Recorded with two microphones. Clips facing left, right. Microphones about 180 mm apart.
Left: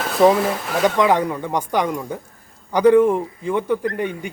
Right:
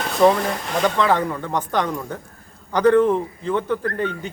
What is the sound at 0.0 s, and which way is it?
Speech, 5° left (ahead or behind).